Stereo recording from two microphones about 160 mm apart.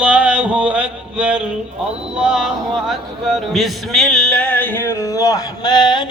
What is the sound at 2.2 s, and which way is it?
Speech, 5° right (ahead or behind).